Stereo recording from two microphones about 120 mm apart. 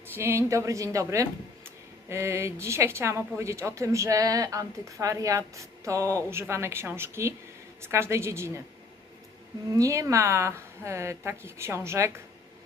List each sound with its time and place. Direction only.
0.1 s speech: 20° right (ahead or behind)
9.7 s speech: 30° right (ahead or behind)